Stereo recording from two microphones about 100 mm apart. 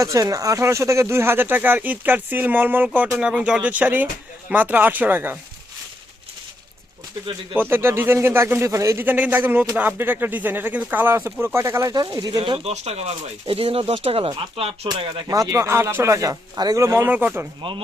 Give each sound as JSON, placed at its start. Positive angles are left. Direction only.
{"t": 0.0, "sound": "speech", "side_deg": -35}
{"t": 7.5, "sound": "speech", "side_deg": -20}
{"t": 9.0, "sound": "speech", "side_deg": -20}
{"t": 11.6, "sound": "speech", "side_deg": -30}
{"t": 12.6, "sound": "speech", "side_deg": -90}
{"t": 15.3, "sound": "speech", "side_deg": -35}
{"t": 16.8, "sound": "speech", "side_deg": -25}
{"t": 17.6, "sound": "speech", "side_deg": -60}